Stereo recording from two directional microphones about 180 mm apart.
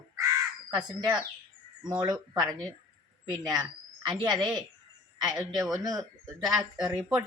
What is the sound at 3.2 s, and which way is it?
Speech, 20° right (ahead or behind).